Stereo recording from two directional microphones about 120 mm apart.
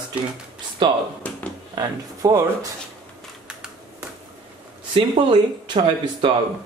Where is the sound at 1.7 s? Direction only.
30° right (ahead or behind).